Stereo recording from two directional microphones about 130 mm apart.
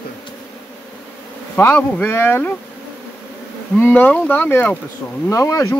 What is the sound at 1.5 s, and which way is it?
Speech, 15° left (ahead or behind).